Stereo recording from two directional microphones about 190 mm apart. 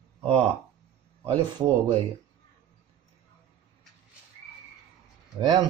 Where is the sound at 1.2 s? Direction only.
25° right (ahead or behind).